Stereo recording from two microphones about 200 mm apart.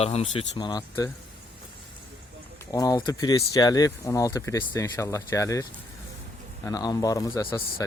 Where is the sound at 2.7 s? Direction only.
20° left (ahead or behind).